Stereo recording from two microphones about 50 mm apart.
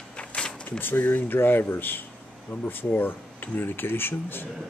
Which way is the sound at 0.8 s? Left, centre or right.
Left.